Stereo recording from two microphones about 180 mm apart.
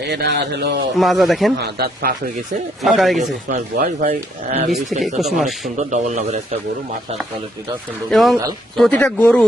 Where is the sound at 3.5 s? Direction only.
50° right (ahead or behind).